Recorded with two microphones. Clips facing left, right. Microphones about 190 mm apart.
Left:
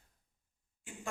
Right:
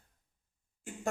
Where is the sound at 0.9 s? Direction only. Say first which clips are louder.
Right 5 dB; 45° right (ahead or behind).